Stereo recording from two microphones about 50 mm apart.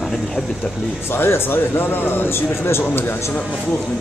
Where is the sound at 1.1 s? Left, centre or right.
Left.